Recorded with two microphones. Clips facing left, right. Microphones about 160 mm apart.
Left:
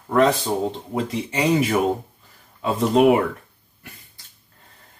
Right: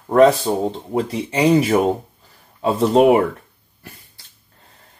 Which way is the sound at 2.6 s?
35° right (ahead or behind).